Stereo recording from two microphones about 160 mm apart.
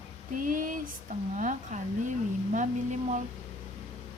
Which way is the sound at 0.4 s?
55° right (ahead or behind).